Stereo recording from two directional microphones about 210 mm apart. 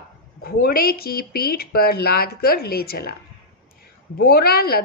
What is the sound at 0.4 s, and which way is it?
A woman's voice, 45° left (ahead or behind).